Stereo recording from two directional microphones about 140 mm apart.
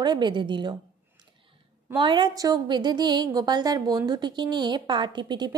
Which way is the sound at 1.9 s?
35° right (ahead or behind).